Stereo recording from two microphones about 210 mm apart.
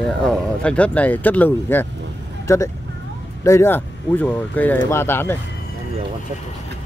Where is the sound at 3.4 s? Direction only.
15° left (ahead or behind).